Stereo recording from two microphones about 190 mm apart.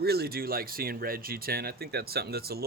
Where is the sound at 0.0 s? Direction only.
55° right (ahead or behind).